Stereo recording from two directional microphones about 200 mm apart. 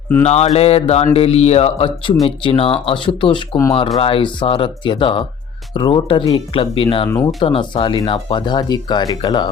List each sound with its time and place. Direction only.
0.3 s speech: 30° left (ahead or behind)